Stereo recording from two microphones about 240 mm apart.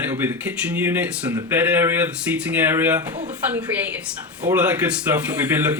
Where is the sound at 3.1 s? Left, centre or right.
Right.